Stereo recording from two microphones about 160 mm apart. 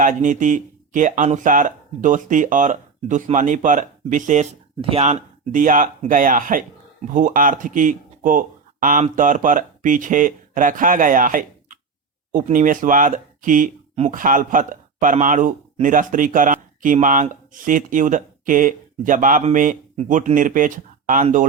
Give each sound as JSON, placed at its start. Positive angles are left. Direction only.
{"t": 0.0, "sound": "speech", "side_deg": -55}
{"t": 4.8, "sound": "speech", "side_deg": -40}
{"t": 5.5, "sound": "speech", "side_deg": -55}